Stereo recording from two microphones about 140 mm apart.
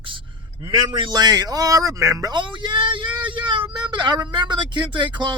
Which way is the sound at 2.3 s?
35° right (ahead or behind).